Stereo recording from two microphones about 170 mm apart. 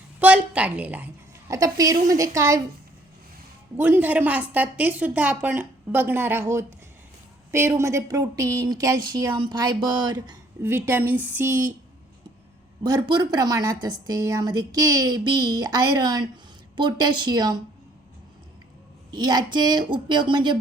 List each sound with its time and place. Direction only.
0.2 s a woman's voice: 10° right (ahead or behind)
1.5 s a woman's voice: 20° right (ahead or behind)
3.8 s a woman's voice: 10° right (ahead or behind); by 10.3 s 25° right (ahead or behind)
10.6 s a woman's voice: 15° right (ahead or behind)
12.8 s a woman's voice: 25° right (ahead or behind)
19.1 s a woman's voice: 25° right (ahead or behind)